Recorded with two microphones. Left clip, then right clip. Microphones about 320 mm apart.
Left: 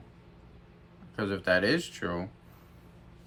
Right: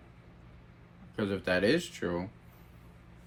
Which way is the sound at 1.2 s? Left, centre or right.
Centre.